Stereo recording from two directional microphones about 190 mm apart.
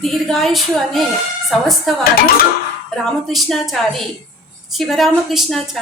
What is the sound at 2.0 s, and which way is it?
Speech, 50° left (ahead or behind).